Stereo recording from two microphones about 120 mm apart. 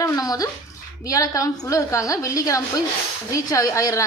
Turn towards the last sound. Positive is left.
turn(degrees=30)  # may be behind; listen again after turning